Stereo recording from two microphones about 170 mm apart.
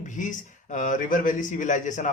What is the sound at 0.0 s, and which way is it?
Speech, 50° left (ahead or behind).